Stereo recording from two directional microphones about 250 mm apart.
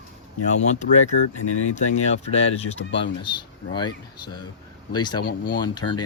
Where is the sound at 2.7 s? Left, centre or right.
Left.